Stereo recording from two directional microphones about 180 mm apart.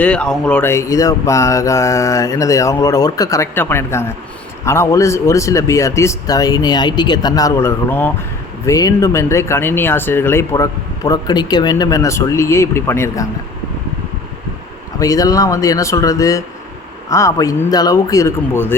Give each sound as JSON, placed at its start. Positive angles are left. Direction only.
{"t": 0.0, "sound": "speech", "side_deg": 5}
{"t": 14.9, "sound": "speech", "side_deg": 20}